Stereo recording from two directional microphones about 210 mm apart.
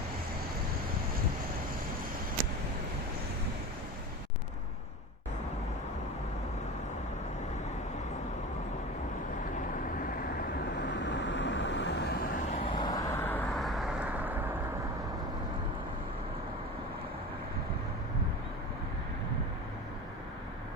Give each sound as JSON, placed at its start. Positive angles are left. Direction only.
{"t": 10.0, "sound": "vehicle", "side_deg": 45}